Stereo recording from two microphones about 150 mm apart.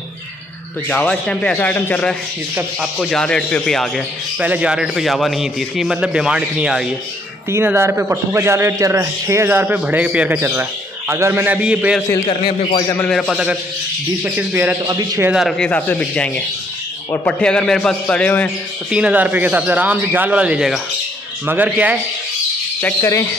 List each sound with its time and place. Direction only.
0.8 s a man's voice: 5° left (ahead or behind)
4.4 s a man's voice: 10° right (ahead or behind)
7.5 s a man's voice: 15° right (ahead or behind)
12.3 s a man's voice: 40° left (ahead or behind)
13.1 s a man's voice: centre (ahead or behind)
14.2 s a man's voice: 10° right (ahead or behind)
14.9 s a man's voice: 25° right (ahead or behind)
15.2 s a man's voice: centre (ahead or behind)
18.9 s a man's voice: 5° right (ahead or behind)
22.8 s a man's voice: 15° left (ahead or behind)